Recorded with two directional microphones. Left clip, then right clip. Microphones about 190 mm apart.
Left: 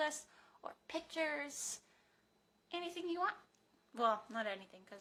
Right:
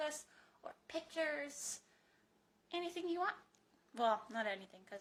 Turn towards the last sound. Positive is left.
turn(degrees=5)  # may be behind; listen again after turning